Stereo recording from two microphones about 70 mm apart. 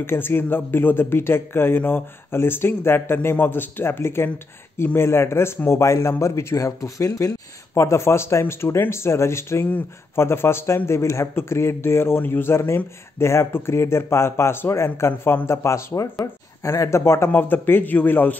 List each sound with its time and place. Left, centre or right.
0.0 s speech: left
17.3 s a man's voice: left